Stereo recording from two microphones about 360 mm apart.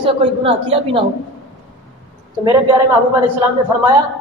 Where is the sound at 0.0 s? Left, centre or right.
Centre.